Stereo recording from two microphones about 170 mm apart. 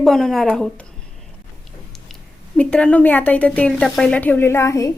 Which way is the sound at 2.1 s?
5° left (ahead or behind).